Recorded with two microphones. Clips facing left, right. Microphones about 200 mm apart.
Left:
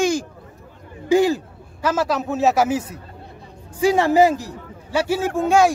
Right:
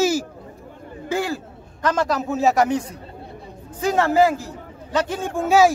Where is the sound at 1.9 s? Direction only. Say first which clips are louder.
Left 1 dB; 5° left (ahead or behind).